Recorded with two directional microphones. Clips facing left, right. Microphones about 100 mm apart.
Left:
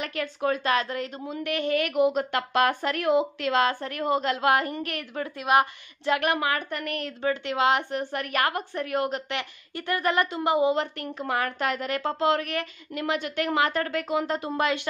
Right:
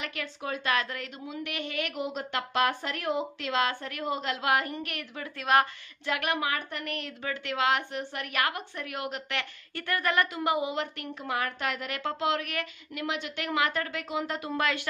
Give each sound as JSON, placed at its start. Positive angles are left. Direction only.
{"t": 0.0, "sound": "a woman's voice", "side_deg": 45}
{"t": 0.7, "sound": "a woman's voice", "side_deg": 30}
{"t": 1.2, "sound": "a woman's voice", "side_deg": 45}
{"t": 3.4, "sound": "a woman's voice", "side_deg": 40}
{"t": 4.0, "sound": "a woman's voice", "side_deg": 50}
{"t": 5.4, "sound": "a woman's voice", "side_deg": 15}
{"t": 6.2, "sound": "a woman's voice", "side_deg": 50}
{"t": 7.1, "sound": "a woman's voice", "side_deg": 30}
{"t": 7.9, "sound": "a woman's voice", "side_deg": 45}
{"t": 9.3, "sound": "a woman's voice", "side_deg": 20}
{"t": 14.2, "sound": "a woman's voice", "side_deg": 30}